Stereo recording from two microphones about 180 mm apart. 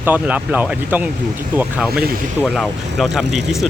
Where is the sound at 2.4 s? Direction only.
Centre (ahead or behind).